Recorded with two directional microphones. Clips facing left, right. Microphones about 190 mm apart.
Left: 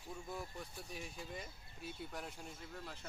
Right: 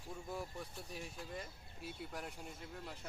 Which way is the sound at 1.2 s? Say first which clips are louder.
Right 1 dB; centre (ahead or behind).